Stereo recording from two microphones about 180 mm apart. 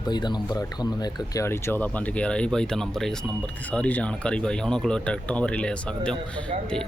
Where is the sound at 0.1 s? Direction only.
25° left (ahead or behind); by 6.1 s 5° left (ahead or behind).